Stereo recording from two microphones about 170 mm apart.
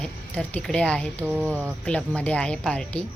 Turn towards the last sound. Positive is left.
turn(degrees=5)  # may be behind; listen again after turning